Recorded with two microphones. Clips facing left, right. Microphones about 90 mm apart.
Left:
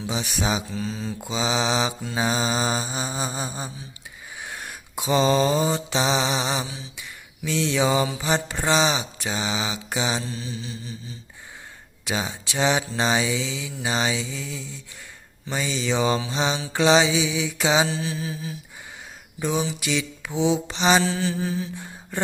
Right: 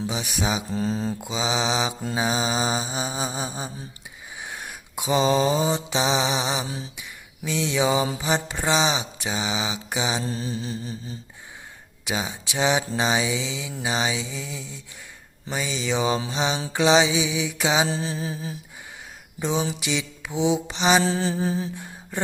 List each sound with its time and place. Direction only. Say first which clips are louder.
0.1 s mantra: left 6 dB; 10° right (ahead or behind)
0.7 s mantra: right 4 dB; 40° right (ahead or behind)
1.2 s mantra: left 5 dB; 15° right (ahead or behind)
6.7 s a sound: right 4 dB; 45° right (ahead or behind)
6.9 s a sound: even; 15° right (ahead or behind)
8.2 s mantra: even; 15° right (ahead or behind)
10.2 s mantra: right 4 dB; 40° right (ahead or behind)
12.0 s mantra: left 1 dB; 15° right (ahead or behind)
17.8 s mantra: right 1 dB; 35° right (ahead or behind)
19.4 s speech: even; 20° right (ahead or behind)
19.8 s mantra: left 1 dB; 15° right (ahead or behind)
21.0 s mantra: right 1 dB; 35° right (ahead or behind)